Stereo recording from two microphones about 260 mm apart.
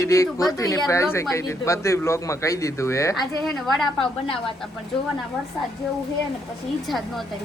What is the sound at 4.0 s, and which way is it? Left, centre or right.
Speech, centre.